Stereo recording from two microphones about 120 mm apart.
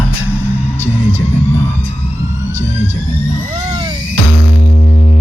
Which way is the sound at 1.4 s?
20° left (ahead or behind).